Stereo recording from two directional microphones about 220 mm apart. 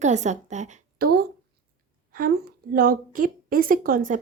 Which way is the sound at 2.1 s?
40° right (ahead or behind).